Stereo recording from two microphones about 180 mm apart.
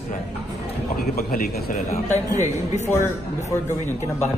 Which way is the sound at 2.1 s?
40° left (ahead or behind).